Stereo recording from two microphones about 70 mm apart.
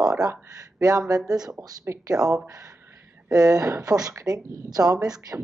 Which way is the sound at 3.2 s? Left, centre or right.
Right.